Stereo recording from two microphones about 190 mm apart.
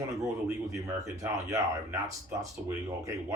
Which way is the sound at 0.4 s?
15° right (ahead or behind).